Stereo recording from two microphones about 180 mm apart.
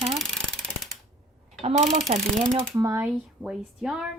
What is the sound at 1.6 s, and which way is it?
Speech, 40° right (ahead or behind).